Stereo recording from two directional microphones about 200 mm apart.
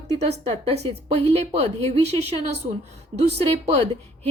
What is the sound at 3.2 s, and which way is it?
Speech, 30° right (ahead or behind).